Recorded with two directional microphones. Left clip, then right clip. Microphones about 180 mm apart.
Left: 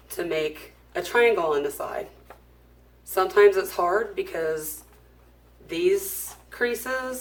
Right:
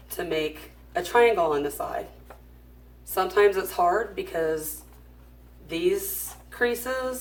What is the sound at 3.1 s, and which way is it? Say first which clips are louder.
Speech: left 3 dB; 30° left (ahead or behind).